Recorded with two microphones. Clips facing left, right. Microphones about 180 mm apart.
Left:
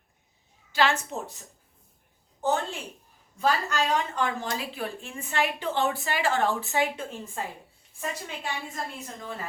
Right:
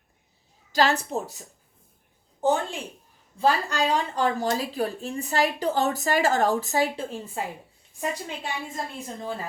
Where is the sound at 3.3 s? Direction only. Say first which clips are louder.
Right 3 dB; 30° right (ahead or behind).